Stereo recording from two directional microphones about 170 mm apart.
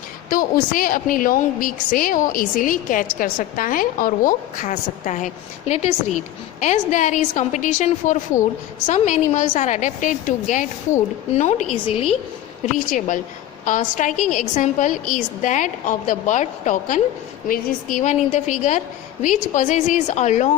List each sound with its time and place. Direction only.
0.3 s a woman's voice: 55° left (ahead or behind); by 12.0 s 35° left (ahead or behind)
12.7 s a woman's voice: 50° left (ahead or behind)